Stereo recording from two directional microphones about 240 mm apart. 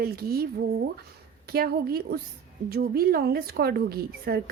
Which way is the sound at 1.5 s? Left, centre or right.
Right.